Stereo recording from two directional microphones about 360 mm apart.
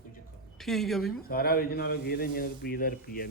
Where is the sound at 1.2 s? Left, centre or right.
Left.